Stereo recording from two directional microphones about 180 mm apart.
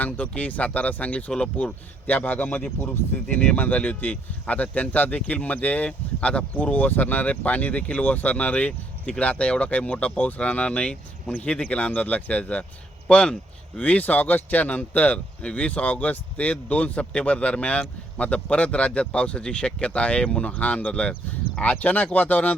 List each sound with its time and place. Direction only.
0.0 s speech: 10° left (ahead or behind)